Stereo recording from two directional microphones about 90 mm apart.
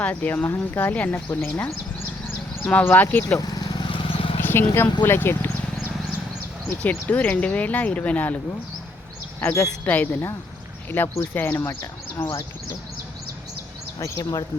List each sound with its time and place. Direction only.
0.0 s speech: 15° left (ahead or behind)
3.3 s vehicle: 45° left (ahead or behind)
3.8 s vehicle: 75° left (ahead or behind)
4.4 s speech: 25° left (ahead or behind)
6.7 s speech: 15° left (ahead or behind)
9.4 s speech: 30° left (ahead or behind)
9.8 s speech: 20° left (ahead or behind)
14.0 s speech: 35° left (ahead or behind)